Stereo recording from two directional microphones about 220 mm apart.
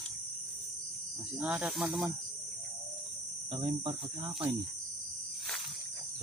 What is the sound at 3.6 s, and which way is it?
Cricket, 20° right (ahead or behind).